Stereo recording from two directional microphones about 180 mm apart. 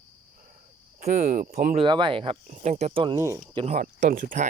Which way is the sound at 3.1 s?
15° right (ahead or behind).